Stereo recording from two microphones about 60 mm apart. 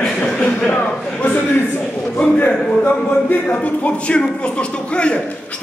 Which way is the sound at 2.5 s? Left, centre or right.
Left.